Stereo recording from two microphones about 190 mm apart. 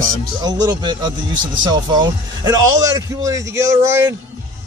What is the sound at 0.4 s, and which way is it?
Music, 20° right (ahead or behind).